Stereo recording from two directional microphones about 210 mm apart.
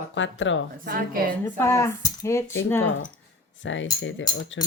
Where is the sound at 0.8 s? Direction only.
45° right (ahead or behind).